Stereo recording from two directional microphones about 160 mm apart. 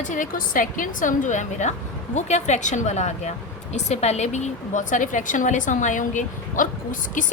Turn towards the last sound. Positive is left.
turn(degrees=55)  # may be behind; listen again after turning